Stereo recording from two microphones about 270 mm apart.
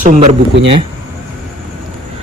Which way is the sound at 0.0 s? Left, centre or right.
Right.